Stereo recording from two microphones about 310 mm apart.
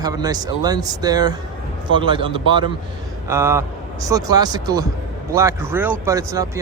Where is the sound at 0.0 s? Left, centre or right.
Centre.